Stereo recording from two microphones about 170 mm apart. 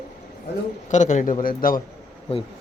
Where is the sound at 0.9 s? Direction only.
45° left (ahead or behind).